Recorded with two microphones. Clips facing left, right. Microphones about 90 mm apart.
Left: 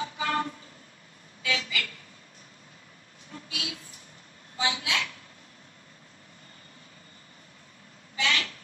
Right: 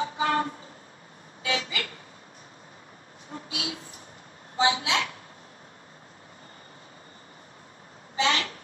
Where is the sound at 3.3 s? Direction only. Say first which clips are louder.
Right 3 dB; 30° right (ahead or behind).